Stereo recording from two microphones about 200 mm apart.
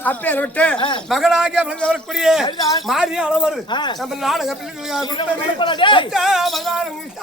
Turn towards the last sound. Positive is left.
turn(degrees=0)  # may be behind; listen again after turning